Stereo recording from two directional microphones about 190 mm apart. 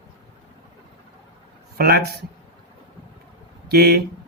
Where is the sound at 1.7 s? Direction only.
55° right (ahead or behind).